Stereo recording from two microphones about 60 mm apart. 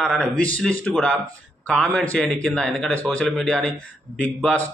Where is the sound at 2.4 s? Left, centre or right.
Centre.